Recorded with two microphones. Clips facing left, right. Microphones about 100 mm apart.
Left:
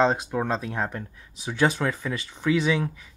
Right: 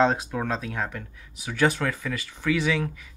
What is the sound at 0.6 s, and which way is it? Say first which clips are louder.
Speech: left 2 dB; 30° left (ahead or behind).